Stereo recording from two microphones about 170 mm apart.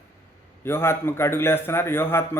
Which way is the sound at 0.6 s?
15° left (ahead or behind).